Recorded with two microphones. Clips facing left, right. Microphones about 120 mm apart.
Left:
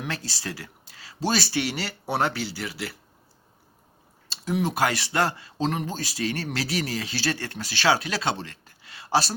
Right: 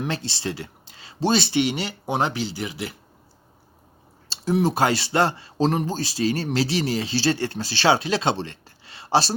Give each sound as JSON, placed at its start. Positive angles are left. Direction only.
{"t": 0.0, "sound": "speech", "side_deg": -25}
{"t": 4.3, "sound": "speech", "side_deg": -30}